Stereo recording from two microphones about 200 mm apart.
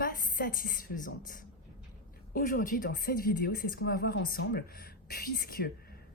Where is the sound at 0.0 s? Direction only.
45° left (ahead or behind).